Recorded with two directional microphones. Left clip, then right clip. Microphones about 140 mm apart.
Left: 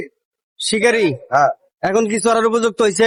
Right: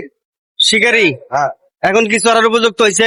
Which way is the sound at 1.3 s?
35° left (ahead or behind).